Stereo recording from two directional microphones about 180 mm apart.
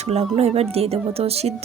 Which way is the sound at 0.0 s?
35° right (ahead or behind).